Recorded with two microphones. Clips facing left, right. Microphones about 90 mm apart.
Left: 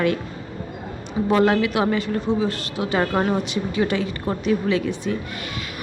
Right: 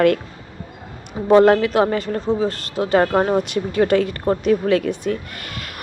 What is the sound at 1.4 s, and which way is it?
A woman's voice, 40° right (ahead or behind).